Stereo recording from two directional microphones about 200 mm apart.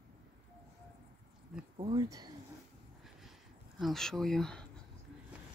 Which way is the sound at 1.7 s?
25° right (ahead or behind).